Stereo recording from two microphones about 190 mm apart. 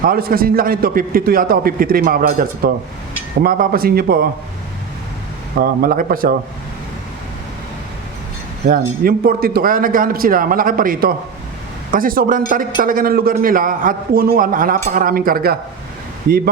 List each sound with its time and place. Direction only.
0.0 s a man's voice: 50° right (ahead or behind)
5.5 s a man's voice: 50° right (ahead or behind)
8.6 s a man's voice: 50° right (ahead or behind)